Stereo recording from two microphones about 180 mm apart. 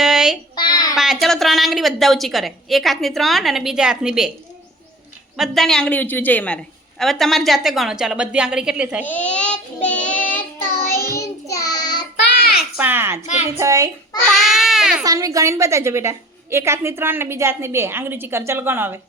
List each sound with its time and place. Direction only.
0.0 s child singing: 5° right (ahead or behind)
0.5 s child singing: 25° left (ahead or behind)
0.9 s a woman's voice: centre (ahead or behind)
5.4 s a woman's voice: centre (ahead or behind)
9.0 s child singing: 10° left (ahead or behind)
12.3 s child singing: 60° left (ahead or behind)
12.7 s a woman's voice: 10° right (ahead or behind)
14.3 s baby cry: centre (ahead or behind)
15.0 s a woman's voice: 20° right (ahead or behind)